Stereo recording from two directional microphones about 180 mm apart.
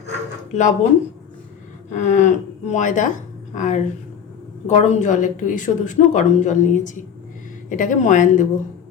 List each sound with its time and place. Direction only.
0.5 s speech: 40° left (ahead or behind)
1.9 s speech: 40° left (ahead or behind)